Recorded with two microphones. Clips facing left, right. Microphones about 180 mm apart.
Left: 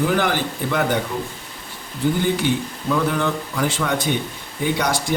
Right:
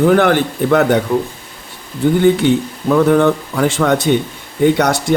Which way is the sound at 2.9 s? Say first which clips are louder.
Right 10 dB; 55° right (ahead or behind).